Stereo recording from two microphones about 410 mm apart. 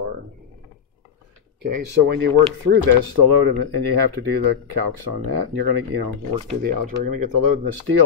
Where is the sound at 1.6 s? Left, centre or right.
Right.